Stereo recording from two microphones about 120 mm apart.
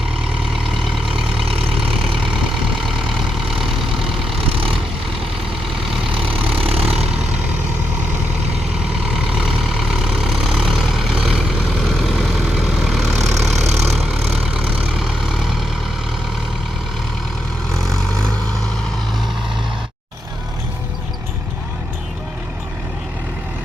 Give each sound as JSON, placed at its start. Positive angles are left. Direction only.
{"t": 0.7, "sound": "vehicle", "side_deg": -5}
{"t": 2.8, "sound": "vehicle", "side_deg": 0}
{"t": 4.4, "sound": "vehicle", "side_deg": -50}
{"t": 6.6, "sound": "vehicle", "side_deg": -55}
{"t": 9.0, "sound": "vehicle", "side_deg": -10}
{"t": 13.6, "sound": "vehicle", "side_deg": -65}
{"t": 13.9, "sound": "vehicle", "side_deg": -10}
{"t": 17.7, "sound": "vehicle", "side_deg": 5}